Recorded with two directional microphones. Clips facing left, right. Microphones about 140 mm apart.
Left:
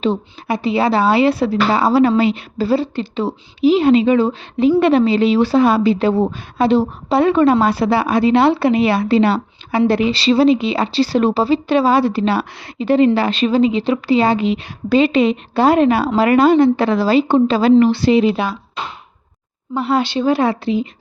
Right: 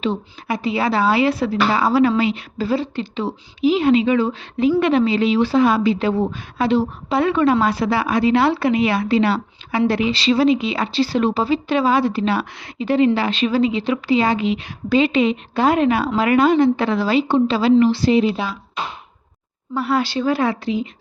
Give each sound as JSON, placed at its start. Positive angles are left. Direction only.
{"t": 0.0, "sound": "a woman's voice", "side_deg": 30}
{"t": 13.5, "sound": "a woman's voice", "side_deg": 25}
{"t": 19.7, "sound": "speech", "side_deg": 25}